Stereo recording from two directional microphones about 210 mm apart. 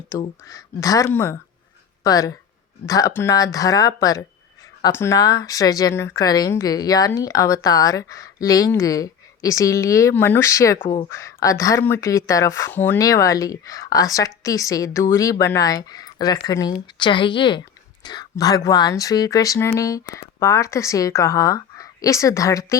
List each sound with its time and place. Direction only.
0.1 s speech: 15° left (ahead or behind)
11.1 s speech: 15° left (ahead or behind)